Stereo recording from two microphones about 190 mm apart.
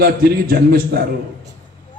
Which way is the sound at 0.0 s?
55° right (ahead or behind).